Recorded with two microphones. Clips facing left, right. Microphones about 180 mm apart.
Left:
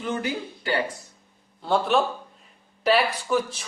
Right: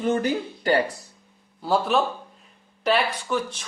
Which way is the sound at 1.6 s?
Centre (ahead or behind).